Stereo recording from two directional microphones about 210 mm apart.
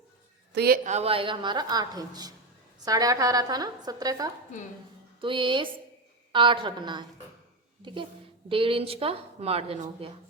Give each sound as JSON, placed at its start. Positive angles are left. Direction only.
{"t": 0.5, "sound": "speech", "side_deg": -50}
{"t": 0.9, "sound": "a woman's voice", "side_deg": -30}